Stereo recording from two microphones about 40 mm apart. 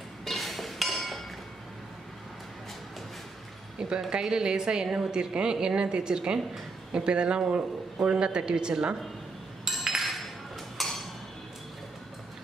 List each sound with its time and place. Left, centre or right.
0.2 s chink: centre
4.1 s a woman's voice: centre
9.7 s chink: centre
10.8 s a sound: centre